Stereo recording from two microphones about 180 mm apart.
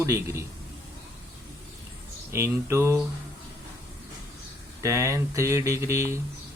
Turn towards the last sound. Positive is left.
turn(degrees=-15)  # may be behind; listen again after turning